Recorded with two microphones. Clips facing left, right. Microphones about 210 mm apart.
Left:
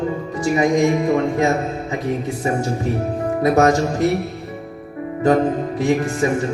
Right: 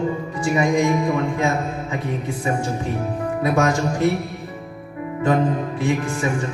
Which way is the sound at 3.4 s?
40° left (ahead or behind).